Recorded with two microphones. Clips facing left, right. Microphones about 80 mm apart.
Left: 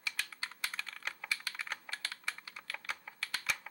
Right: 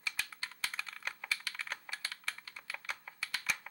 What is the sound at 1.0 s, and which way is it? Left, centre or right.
Computer keyboard, centre.